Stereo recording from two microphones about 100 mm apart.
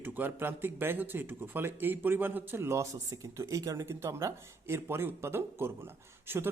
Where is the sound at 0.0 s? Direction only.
20° right (ahead or behind).